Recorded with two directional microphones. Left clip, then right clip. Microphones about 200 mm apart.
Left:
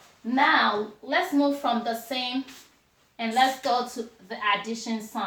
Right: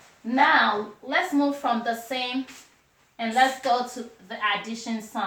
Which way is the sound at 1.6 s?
10° right (ahead or behind).